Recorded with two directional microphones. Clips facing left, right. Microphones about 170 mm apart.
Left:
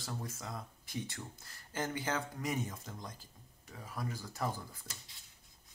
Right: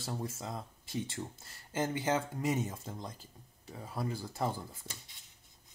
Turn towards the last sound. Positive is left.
turn(degrees=-25)  # may be behind; listen again after turning